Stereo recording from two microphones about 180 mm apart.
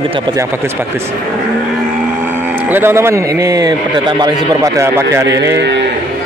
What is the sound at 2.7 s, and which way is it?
Speech, 10° right (ahead or behind).